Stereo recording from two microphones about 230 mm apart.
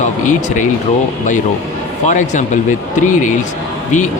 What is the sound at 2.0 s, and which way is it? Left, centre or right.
Speech, left.